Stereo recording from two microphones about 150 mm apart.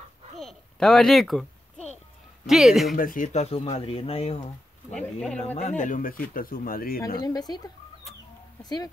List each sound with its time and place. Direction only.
0.4 s a sound: 5° left (ahead or behind)
2.4 s speech: centre (ahead or behind)
3.0 s speech: 65° left (ahead or behind)
3.3 s speech: 45° left (ahead or behind)
4.9 s speech: 5° left (ahead or behind)
5.4 s speech: 50° left (ahead or behind); by 7.0 s 75° left (ahead or behind)
7.2 s speech: 25° left (ahead or behind)